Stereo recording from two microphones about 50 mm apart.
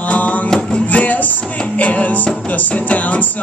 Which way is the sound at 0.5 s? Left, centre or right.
Left.